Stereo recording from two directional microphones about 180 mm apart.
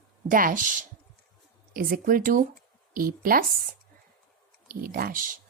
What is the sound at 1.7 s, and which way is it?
A woman's voice, 50° right (ahead or behind).